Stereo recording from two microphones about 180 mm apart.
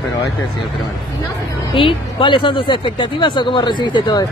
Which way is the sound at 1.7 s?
30° left (ahead or behind).